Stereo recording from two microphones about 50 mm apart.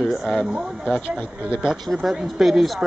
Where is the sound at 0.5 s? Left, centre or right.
Right.